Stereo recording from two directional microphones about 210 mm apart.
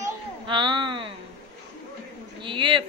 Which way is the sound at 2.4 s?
25° right (ahead or behind).